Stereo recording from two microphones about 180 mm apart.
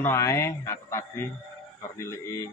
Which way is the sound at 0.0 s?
15° left (ahead or behind).